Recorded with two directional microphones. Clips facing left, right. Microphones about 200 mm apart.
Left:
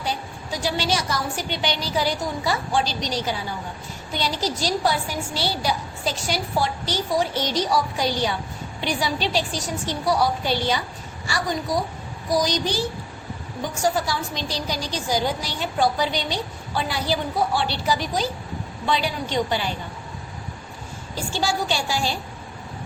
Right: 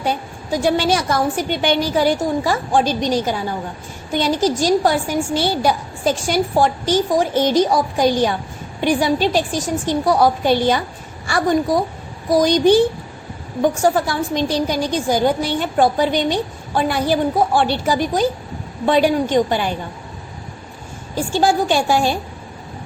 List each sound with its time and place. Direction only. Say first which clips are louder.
0.0 s a woman's voice: right 6 dB; 50° right (ahead or behind)
21.2 s a woman's voice: right 8 dB; 50° right (ahead or behind)